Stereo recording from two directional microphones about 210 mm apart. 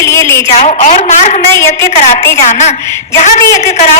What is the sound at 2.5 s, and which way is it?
Speech, 35° left (ahead or behind).